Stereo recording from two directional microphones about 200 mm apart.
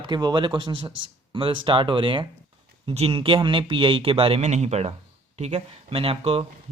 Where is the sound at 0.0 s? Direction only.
20° right (ahead or behind).